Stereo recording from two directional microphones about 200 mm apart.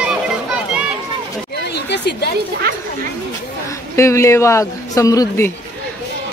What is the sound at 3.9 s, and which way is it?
Speech, 15° left (ahead or behind).